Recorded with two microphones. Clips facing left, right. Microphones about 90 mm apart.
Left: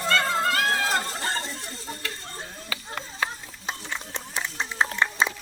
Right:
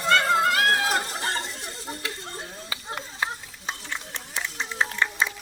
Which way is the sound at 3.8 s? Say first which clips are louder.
Left 1 dB; 25° left (ahead or behind).